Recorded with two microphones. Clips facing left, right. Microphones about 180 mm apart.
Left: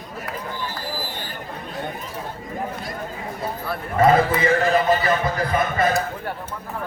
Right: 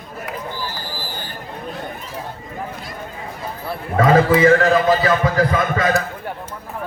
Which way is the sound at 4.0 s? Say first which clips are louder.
Right 4 dB; 90° right.